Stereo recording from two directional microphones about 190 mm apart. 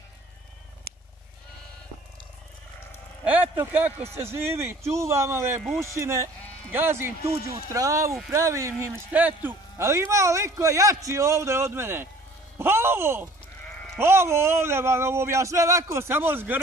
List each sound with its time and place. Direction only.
3.3 s speech: 10° right (ahead or behind)